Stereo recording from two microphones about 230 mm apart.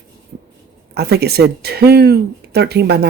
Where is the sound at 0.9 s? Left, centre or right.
Right.